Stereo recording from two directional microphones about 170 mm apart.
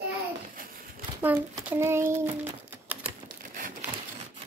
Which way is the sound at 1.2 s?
10° right (ahead or behind).